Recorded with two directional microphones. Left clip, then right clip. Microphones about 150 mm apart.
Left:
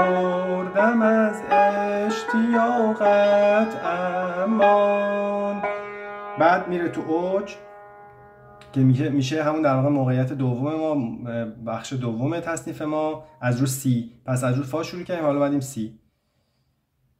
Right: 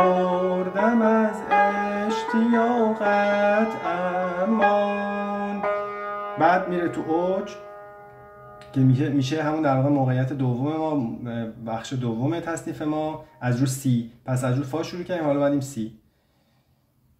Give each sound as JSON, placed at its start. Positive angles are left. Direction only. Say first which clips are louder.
{"t": 0.0, "sound": "music", "louder": "right 1 dB", "side_deg": 35}
{"t": 6.3, "sound": "speech", "louder": "left 1 dB", "side_deg": 25}
{"t": 8.7, "sound": "speech", "louder": "left 1 dB", "side_deg": 30}